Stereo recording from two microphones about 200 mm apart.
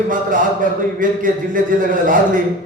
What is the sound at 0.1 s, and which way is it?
A man's voice, 40° right (ahead or behind).